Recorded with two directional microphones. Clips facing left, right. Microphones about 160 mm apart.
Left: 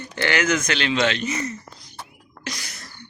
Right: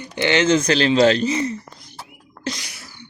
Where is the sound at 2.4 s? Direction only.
30° right (ahead or behind).